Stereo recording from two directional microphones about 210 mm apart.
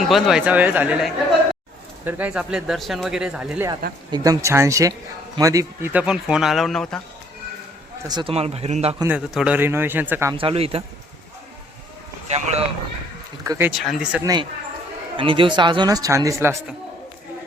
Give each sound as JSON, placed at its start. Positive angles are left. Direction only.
{"t": 0.1, "sound": "a man's voice", "side_deg": 0}
{"t": 4.1, "sound": "a man's voice", "side_deg": -15}
{"t": 8.0, "sound": "speech", "side_deg": -20}
{"t": 9.0, "sound": "a man's voice", "side_deg": -5}
{"t": 10.3, "sound": "speech", "side_deg": -25}
{"t": 12.3, "sound": "speech", "side_deg": -30}
{"t": 13.4, "sound": "a man's voice", "side_deg": -15}
{"t": 13.7, "sound": "speech", "side_deg": 0}
{"t": 15.1, "sound": "speech", "side_deg": -25}